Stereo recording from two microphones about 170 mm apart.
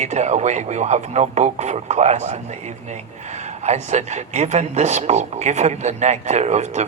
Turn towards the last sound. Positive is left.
turn(degrees=-40)  # may be behind; listen again after turning